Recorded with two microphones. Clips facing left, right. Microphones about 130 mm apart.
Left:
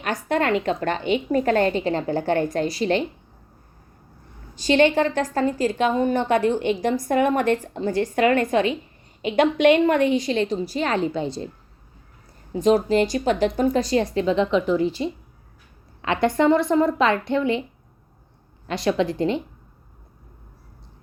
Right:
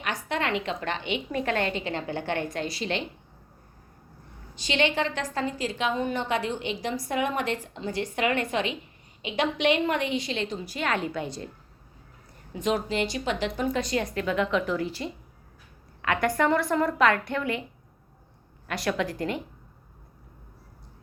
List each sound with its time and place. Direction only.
0.0 s a woman's voice: 45° left (ahead or behind)
4.5 s a woman's voice: 45° left (ahead or behind); by 11.4 s 30° left (ahead or behind)
12.5 s a woman's voice: 35° left (ahead or behind)
18.7 s a woman's voice: 25° left (ahead or behind)